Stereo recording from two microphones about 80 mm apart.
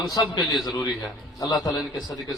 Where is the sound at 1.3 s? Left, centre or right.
Left.